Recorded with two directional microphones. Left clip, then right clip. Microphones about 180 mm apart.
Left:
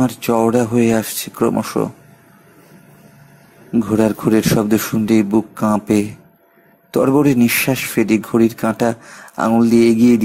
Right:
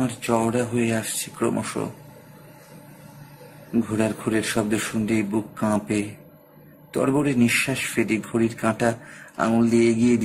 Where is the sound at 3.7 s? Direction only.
30° left (ahead or behind).